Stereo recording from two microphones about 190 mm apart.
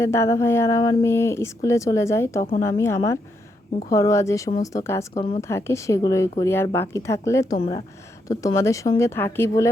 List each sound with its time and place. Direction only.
0.0 s speech: 15° left (ahead or behind)
5.1 s a woman's voice: 30° left (ahead or behind)
5.4 s speech: 15° left (ahead or behind)